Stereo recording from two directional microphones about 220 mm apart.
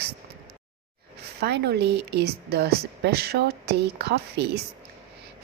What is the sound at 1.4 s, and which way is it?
A woman's voice, 50° right (ahead or behind).